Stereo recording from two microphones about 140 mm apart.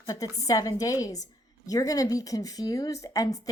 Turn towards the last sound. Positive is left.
turn(degrees=25)  # may be behind; listen again after turning